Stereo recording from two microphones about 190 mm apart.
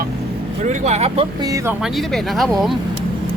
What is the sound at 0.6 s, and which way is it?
Speech, 40° right (ahead or behind).